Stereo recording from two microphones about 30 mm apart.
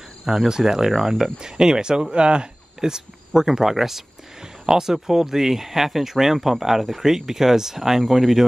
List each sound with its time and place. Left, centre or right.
0.5 s speech: centre
1.4 s speech: right
4.6 s speech: right; by 8.5 s centre